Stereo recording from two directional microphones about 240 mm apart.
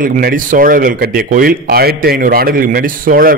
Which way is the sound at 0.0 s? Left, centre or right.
Right.